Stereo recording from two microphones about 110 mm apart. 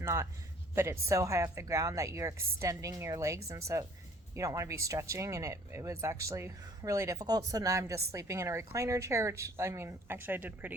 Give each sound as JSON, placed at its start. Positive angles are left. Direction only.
{"t": 0.0, "sound": "a man's voice", "side_deg": -25}